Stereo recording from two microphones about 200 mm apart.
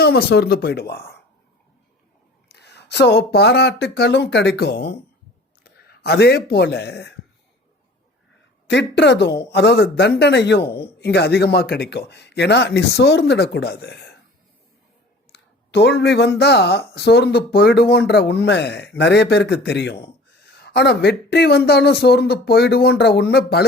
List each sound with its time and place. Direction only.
0.0 s speech: 50° left (ahead or behind)
2.5 s speech: 55° left (ahead or behind)
8.7 s speech: 60° left (ahead or behind)
15.3 s speech: 60° left (ahead or behind)